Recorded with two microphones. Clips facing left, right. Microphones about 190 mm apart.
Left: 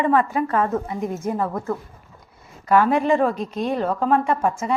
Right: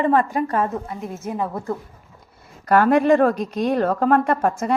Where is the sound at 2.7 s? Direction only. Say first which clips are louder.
Right 2 dB; 65° right (ahead or behind).